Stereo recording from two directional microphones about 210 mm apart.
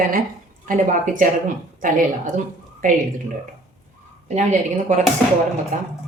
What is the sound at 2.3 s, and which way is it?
A woman's voice, 35° right (ahead or behind).